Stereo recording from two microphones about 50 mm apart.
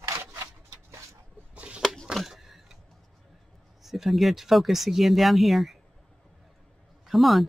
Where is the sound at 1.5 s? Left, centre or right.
Right.